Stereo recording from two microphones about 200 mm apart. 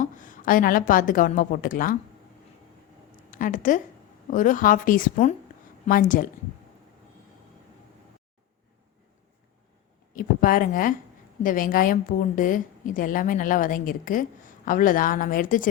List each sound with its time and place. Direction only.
0.0 s a woman's voice: 40° left (ahead or behind)
3.2 s a woman's voice: 40° left (ahead or behind)
10.2 s a woman's voice: 45° left (ahead or behind)